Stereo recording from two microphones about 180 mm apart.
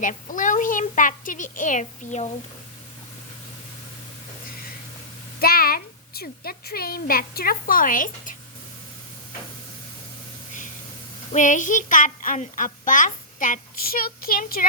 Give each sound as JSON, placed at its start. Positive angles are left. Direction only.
{"t": 0.0, "sound": "a woman's voice", "side_deg": 45}
{"t": 5.4, "sound": "a woman's voice", "side_deg": 55}
{"t": 11.3, "sound": "a woman's voice", "side_deg": 45}